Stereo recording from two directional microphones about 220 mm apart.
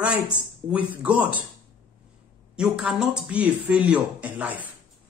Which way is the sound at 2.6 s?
5° right (ahead or behind).